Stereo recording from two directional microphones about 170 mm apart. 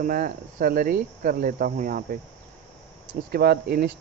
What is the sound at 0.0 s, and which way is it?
Speech, 55° right (ahead or behind).